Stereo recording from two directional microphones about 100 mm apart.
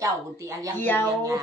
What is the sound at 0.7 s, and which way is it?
Speech, 20° left (ahead or behind).